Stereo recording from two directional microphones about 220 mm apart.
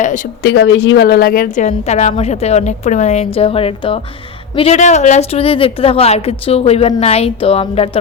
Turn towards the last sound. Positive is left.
turn(degrees=25)  # may be behind; listen again after turning